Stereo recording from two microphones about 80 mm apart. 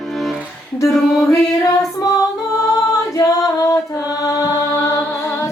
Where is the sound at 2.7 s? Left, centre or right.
Left.